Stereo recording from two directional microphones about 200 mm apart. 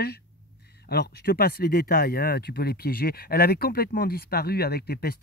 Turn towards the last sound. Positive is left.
turn(degrees=50)  # may be behind; listen again after turning